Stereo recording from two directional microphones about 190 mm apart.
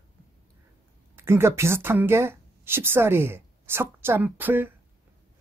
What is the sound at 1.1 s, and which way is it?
A woman's voice, 15° right (ahead or behind).